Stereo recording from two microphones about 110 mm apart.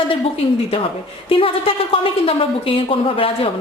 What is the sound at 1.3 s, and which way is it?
A woman's voice, 55° left (ahead or behind).